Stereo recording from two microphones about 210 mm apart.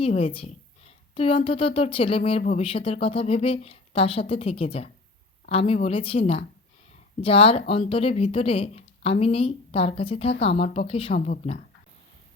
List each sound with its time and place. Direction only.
0.0 s a woman's voice: 30° left (ahead or behind)
2.6 s a woman's voice: 25° left (ahead or behind)